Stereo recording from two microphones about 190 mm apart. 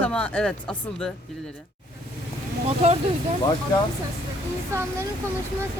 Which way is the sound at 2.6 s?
35° right (ahead or behind).